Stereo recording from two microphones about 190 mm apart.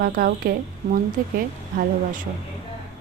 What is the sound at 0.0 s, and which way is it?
Speech, 50° right (ahead or behind).